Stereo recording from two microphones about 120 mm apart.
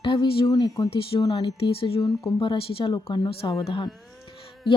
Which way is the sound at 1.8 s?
50° left (ahead or behind).